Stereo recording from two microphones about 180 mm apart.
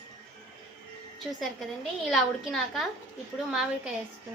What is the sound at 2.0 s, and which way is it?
A woman's voice, centre (ahead or behind).